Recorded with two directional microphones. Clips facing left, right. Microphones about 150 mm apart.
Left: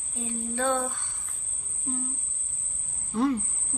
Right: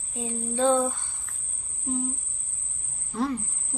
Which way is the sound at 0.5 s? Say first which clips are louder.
Right 5 dB; 25° right (ahead or behind).